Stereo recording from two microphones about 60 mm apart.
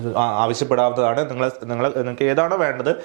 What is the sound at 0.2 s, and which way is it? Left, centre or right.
A man's voice, right.